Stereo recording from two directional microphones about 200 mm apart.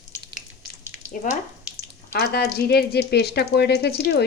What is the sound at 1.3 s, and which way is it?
Speech, 40° left (ahead or behind).